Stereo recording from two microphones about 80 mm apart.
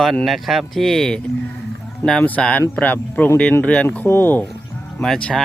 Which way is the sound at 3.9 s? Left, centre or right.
Left.